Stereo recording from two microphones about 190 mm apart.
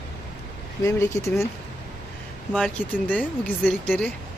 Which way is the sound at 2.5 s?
5° left (ahead or behind).